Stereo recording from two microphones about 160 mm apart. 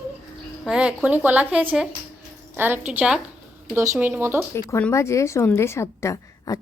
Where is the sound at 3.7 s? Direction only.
15° right (ahead or behind).